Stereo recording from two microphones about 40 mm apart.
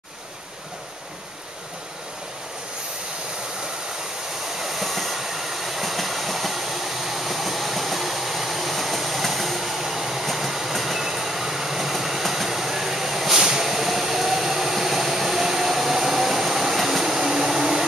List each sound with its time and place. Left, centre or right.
4.6 s train: centre